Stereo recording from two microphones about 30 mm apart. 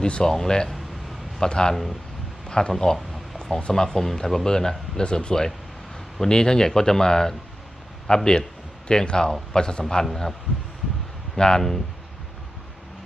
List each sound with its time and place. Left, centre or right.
0.0 s speech: left
0.3 s speech: centre
1.7 s speech: centre
2.5 s speech: left
4.4 s speech: left
10.0 s speech: centre
11.3 s speech: left